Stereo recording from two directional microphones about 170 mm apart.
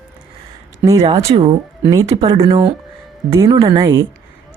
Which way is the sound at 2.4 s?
30° right (ahead or behind).